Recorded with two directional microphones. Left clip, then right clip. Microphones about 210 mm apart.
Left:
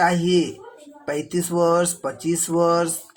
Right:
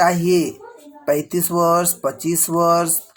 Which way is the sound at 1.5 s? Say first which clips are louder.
Right 2 dB; 30° right (ahead or behind).